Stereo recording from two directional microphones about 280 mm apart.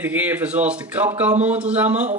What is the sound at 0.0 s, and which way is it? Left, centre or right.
A man's voice, centre.